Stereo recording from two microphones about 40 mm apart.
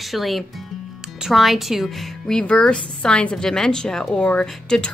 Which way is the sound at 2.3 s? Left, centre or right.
Centre.